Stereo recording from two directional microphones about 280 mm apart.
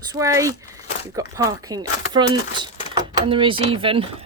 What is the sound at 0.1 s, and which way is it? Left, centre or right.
Speech, centre.